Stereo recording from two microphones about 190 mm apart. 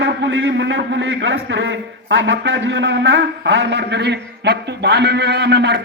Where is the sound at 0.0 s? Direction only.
75° right (ahead or behind).